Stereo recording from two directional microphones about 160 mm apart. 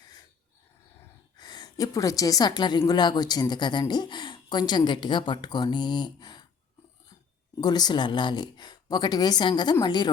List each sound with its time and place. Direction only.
1.4 s a woman's voice: 25° left (ahead or behind)
7.6 s a woman's voice: 25° left (ahead or behind)